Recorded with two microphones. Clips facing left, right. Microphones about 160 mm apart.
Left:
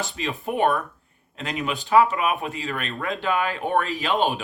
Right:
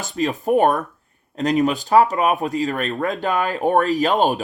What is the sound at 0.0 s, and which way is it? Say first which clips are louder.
Speech: right 6 dB; 40° right (ahead or behind).